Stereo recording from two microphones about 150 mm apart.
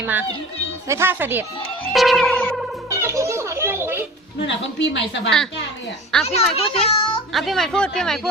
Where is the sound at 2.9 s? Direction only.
20° right (ahead or behind).